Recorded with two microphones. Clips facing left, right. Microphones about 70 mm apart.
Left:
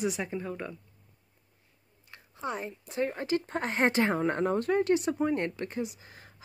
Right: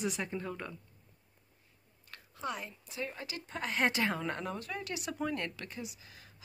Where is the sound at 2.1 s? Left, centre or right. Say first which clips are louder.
Left 4 dB; left.